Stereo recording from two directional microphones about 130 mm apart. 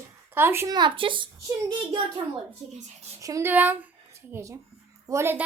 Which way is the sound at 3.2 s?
25° right (ahead or behind).